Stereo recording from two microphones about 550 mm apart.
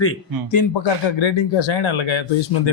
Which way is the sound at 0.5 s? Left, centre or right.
Left.